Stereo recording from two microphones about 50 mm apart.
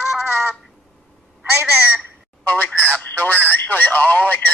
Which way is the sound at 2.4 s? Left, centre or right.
Left.